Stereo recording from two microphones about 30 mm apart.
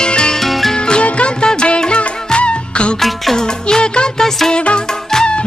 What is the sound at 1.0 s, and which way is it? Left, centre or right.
Music, left.